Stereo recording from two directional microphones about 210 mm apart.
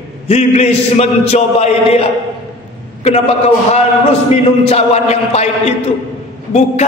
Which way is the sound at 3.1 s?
35° left (ahead or behind).